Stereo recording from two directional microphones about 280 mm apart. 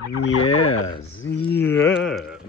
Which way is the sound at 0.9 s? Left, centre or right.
Left.